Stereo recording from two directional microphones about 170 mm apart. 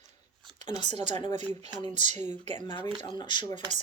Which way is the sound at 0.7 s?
25° left (ahead or behind).